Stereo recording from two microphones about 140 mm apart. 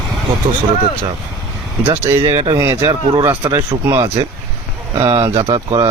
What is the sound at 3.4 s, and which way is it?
Speech, 25° right (ahead or behind).